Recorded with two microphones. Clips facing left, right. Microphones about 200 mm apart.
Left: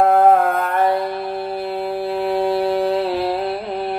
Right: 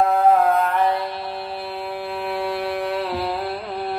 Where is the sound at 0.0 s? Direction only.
50° left (ahead or behind).